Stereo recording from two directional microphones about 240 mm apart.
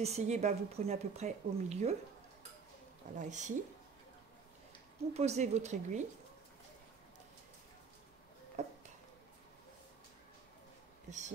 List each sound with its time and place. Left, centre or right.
0.0 s speech: right
3.2 s speech: right
5.1 s speech: right
8.6 s a sound: right
11.1 s speech: right